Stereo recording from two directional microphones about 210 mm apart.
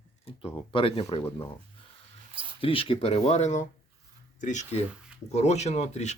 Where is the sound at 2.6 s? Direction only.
25° left (ahead or behind).